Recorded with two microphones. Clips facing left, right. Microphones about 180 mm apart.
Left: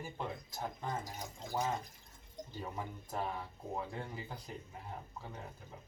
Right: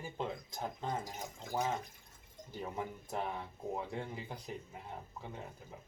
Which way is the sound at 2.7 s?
20° right (ahead or behind).